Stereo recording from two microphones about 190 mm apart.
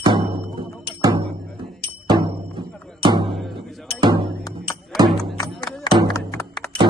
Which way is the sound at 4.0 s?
25° right (ahead or behind).